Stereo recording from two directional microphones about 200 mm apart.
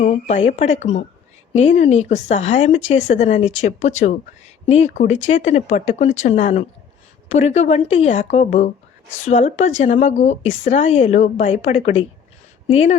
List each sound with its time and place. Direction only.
0.0 s speech: 35° left (ahead or behind)